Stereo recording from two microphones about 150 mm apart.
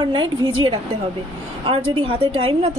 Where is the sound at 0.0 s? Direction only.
30° right (ahead or behind).